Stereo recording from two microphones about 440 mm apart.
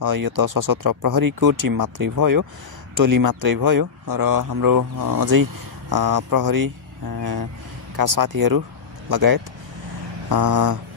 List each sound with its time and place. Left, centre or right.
0.0 s speech: right